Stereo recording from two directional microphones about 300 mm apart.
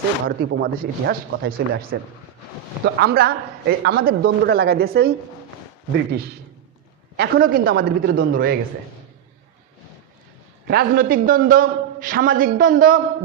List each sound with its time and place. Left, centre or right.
0.3 s a man's voice: right
7.2 s a man's voice: right
10.7 s a man's voice: right